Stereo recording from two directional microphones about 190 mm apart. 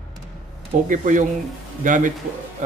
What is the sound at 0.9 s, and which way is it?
Speech, 45° right (ahead or behind).